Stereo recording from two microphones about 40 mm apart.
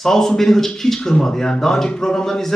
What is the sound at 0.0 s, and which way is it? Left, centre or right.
Speech, centre.